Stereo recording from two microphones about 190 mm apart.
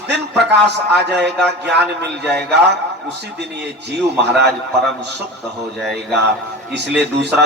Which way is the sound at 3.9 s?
60° right (ahead or behind).